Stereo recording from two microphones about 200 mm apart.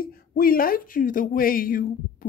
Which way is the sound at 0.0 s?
45° left (ahead or behind).